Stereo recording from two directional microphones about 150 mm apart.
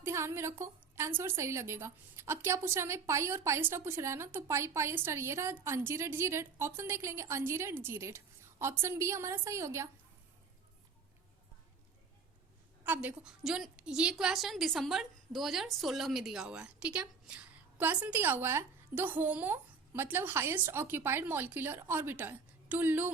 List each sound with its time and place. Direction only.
0.0 s a woman's voice: 20° right (ahead or behind)
12.8 s a woman's voice: 10° right (ahead or behind)